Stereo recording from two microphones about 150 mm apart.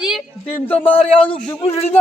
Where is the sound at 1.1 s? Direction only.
35° left (ahead or behind).